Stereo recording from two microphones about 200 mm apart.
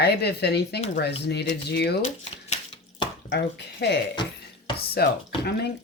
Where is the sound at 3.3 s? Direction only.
60° left (ahead or behind).